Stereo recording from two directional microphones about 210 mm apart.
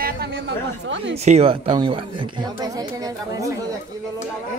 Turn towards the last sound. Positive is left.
turn(degrees=-15)  # may be behind; listen again after turning